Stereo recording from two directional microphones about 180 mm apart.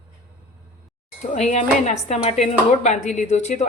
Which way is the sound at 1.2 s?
40° left (ahead or behind).